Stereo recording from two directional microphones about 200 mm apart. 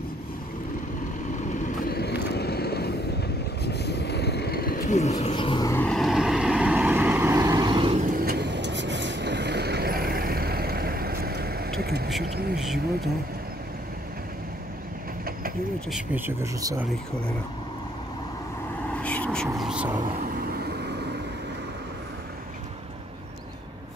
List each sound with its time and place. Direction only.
1.5 s vehicle: 50° left (ahead or behind); by 5.8 s 20° left (ahead or behind)
5.8 s vehicle: centre (ahead or behind); by 8.0 s 25° right (ahead or behind)
8.0 s vehicle: 45° right (ahead or behind)
15.9 s speech: 10° right (ahead or behind)
18.9 s whispering: 5° left (ahead or behind)
20.0 s vehicle: 45° right (ahead or behind)